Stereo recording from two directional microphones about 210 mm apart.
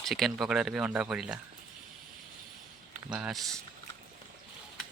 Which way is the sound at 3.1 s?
5° right (ahead or behind).